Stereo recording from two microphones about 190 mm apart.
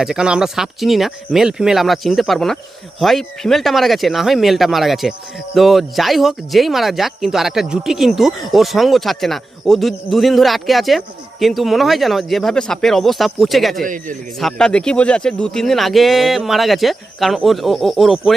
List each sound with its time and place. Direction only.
0.0 s speech: 5° right (ahead or behind)
13.8 s speech: 45° right (ahead or behind)
14.3 s speech: 5° left (ahead or behind)